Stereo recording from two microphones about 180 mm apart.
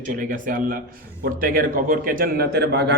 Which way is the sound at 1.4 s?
50° right (ahead or behind).